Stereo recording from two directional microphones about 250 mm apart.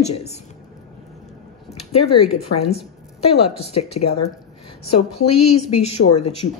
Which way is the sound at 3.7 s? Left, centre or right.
Left.